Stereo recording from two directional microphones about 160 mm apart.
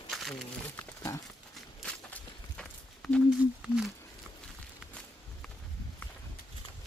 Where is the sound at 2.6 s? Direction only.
5° left (ahead or behind).